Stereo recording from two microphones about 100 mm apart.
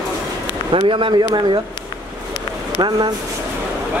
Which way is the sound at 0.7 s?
60° right (ahead or behind).